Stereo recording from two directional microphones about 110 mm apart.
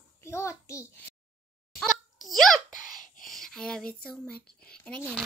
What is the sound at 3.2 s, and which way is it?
Speech, 5° left (ahead or behind).